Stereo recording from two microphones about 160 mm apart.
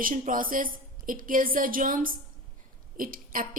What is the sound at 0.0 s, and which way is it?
Speech, 60° right (ahead or behind).